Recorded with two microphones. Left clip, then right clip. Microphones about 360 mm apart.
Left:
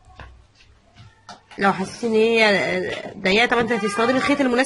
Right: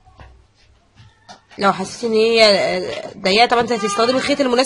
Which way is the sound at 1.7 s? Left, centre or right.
Right.